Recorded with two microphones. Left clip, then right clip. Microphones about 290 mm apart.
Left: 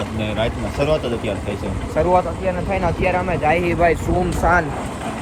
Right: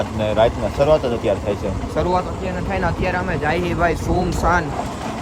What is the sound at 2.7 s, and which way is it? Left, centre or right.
Speech, centre.